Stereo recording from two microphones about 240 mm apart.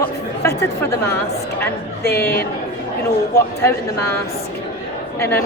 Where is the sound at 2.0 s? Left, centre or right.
Left.